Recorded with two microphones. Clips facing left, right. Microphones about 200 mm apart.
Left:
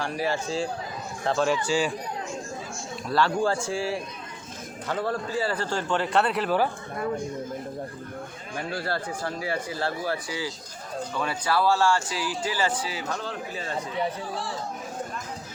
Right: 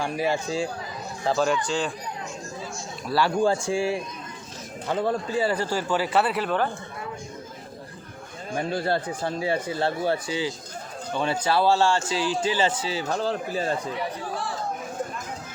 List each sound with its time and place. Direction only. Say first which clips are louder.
0.0 s a man's voice: right 2 dB; 15° right (ahead or behind)
1.3 s speech: right 1 dB; centre (ahead or behind)
1.6 s speech: left 2 dB; 10° left (ahead or behind)
3.1 s a man's voice: right 2 dB; 10° right (ahead or behind)
8.5 s speech: right 5 dB; 20° right (ahead or behind)